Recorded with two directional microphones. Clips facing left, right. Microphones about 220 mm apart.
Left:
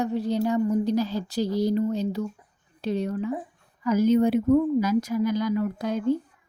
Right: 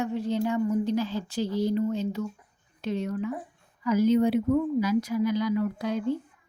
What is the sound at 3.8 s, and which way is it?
Speech, 45° left (ahead or behind).